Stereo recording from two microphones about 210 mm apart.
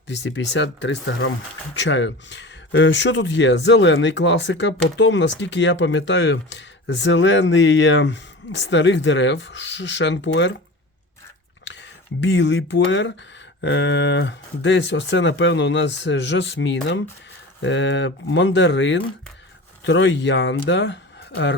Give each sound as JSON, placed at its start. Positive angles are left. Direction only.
{"t": 0.1, "sound": "speech", "side_deg": 60}
{"t": 11.6, "sound": "speech", "side_deg": 60}